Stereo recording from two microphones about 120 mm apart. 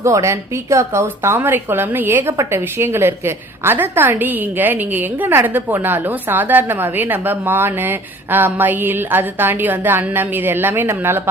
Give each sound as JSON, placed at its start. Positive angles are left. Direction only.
{"t": 0.0, "sound": "a woman's voice", "side_deg": -25}